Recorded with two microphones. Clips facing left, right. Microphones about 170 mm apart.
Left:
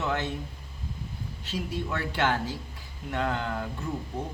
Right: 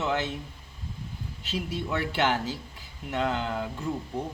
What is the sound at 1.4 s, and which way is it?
A man's voice, 15° right (ahead or behind).